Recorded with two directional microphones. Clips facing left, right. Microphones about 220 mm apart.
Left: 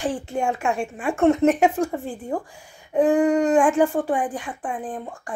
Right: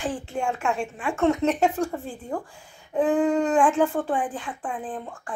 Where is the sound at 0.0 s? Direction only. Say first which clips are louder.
Left 3 dB; 15° left (ahead or behind).